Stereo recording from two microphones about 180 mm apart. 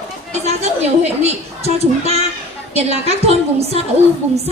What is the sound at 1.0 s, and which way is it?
Speech, 35° right (ahead or behind).